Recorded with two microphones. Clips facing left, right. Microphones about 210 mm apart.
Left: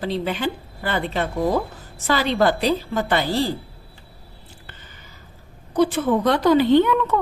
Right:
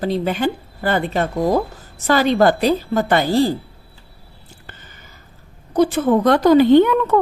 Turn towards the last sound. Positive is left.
turn(degrees=-45)  # may be behind; listen again after turning